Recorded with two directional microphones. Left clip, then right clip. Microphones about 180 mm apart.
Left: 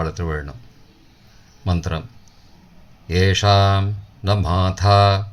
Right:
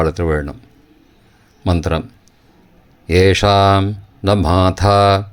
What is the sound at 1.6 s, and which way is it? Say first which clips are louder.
Speech: right 8 dB; 45° right (ahead or behind).